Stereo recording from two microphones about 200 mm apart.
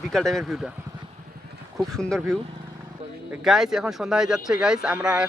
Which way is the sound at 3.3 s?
5° right (ahead or behind).